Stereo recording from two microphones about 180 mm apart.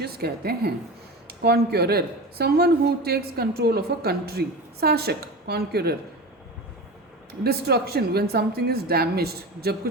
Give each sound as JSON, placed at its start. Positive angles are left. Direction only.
{"t": 0.0, "sound": "speech", "side_deg": -60}
{"t": 7.4, "sound": "speech", "side_deg": -60}